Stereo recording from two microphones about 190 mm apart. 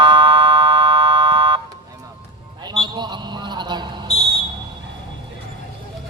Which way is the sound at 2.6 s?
20° right (ahead or behind).